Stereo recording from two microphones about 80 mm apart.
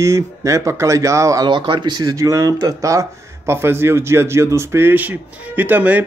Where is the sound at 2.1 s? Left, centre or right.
Right.